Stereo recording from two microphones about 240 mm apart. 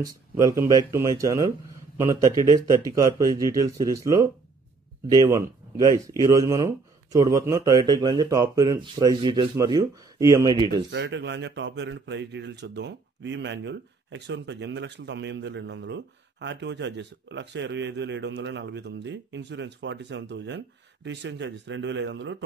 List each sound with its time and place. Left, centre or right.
0.0 s speech: centre
10.9 s a man's voice: right